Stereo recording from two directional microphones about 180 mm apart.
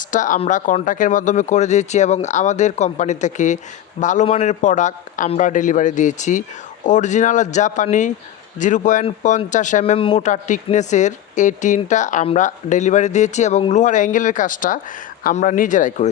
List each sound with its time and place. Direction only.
0.1 s speech: 45° left (ahead or behind)